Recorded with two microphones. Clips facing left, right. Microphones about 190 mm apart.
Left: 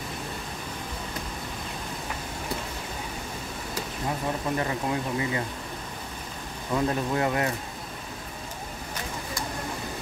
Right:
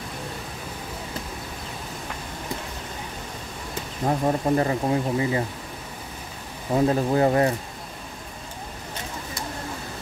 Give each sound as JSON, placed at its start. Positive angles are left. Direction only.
{"t": 4.0, "sound": "speech", "side_deg": -40}
{"t": 6.7, "sound": "speech", "side_deg": -30}